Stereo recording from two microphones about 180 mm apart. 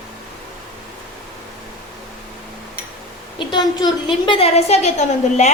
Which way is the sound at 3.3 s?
25° left (ahead or behind).